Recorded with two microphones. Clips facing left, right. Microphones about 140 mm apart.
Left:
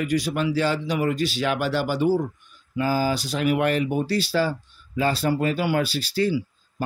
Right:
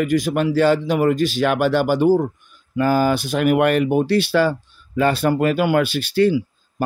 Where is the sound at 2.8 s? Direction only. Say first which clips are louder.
Right 6 dB; 65° right (ahead or behind).